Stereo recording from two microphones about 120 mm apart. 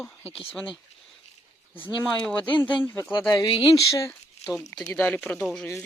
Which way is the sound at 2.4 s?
45° left (ahead or behind).